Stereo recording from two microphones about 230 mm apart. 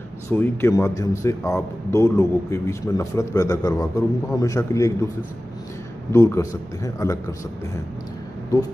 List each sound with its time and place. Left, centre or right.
0.3 s speech: centre
6.1 s speech: centre